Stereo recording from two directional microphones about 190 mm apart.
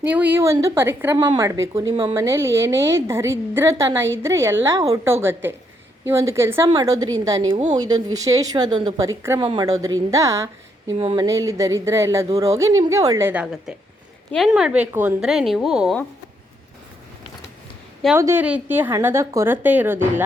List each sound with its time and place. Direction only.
0.0 s a woman's voice: 10° right (ahead or behind)
1.9 s speech: 30° right (ahead or behind)
2.1 s a woman's voice: 15° right (ahead or behind)
10.9 s a woman's voice: 25° right (ahead or behind); by 16.0 s centre (ahead or behind)
18.2 s a woman's voice: 10° right (ahead or behind)